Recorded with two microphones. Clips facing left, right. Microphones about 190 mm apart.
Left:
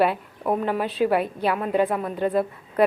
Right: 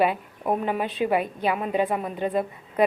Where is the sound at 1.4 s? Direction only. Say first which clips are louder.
Left 2 dB; 10° right (ahead or behind).